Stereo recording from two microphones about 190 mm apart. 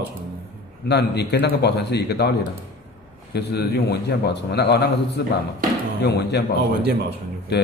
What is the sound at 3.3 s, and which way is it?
A man's voice, 55° left (ahead or behind).